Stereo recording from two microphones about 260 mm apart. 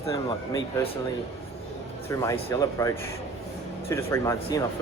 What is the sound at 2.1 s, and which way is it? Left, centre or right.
Speech, centre.